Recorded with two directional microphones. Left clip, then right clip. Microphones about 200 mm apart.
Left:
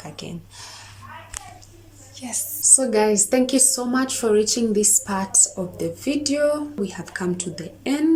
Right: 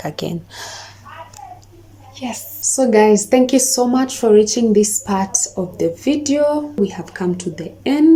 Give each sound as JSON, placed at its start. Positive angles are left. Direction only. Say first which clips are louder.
{"t": 0.0, "sound": "speech", "louder": "right 12 dB", "side_deg": -35}
{"t": 2.1, "sound": "a woman's voice", "louder": "right 4 dB", "side_deg": -10}